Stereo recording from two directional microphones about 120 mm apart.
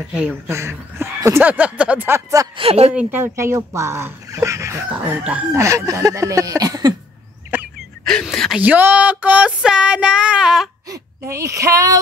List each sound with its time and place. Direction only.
0.0 s speech: 5° right (ahead or behind)
0.5 s speech: 25° right (ahead or behind)
1.5 s child singing: 10° right (ahead or behind)
2.5 s speech: 55° right (ahead or behind)
2.9 s speech: 15° right (ahead or behind)
4.9 s child singing: 15° right (ahead or behind)
5.5 s speech: 25° right (ahead or behind)
8.0 s speech: 5° left (ahead or behind)
8.5 s child singing: 15° right (ahead or behind)
10.9 s speech: 25° right (ahead or behind)